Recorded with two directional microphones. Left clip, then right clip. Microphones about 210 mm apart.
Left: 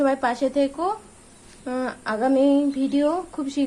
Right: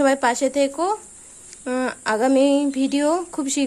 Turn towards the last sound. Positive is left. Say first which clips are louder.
# right 4 dB
turn(degrees=-45)  # may be behind; listen again after turning